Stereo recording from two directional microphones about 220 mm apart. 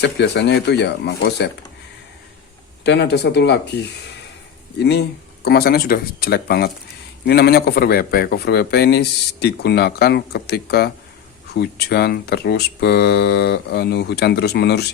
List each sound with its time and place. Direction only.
0.0 s a man's voice: 50° left (ahead or behind)
2.8 s a man's voice: 50° left (ahead or behind)